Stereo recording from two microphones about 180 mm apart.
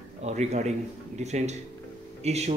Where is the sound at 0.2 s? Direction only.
40° right (ahead or behind).